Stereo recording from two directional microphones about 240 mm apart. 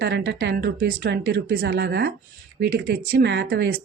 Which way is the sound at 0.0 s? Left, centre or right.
Right.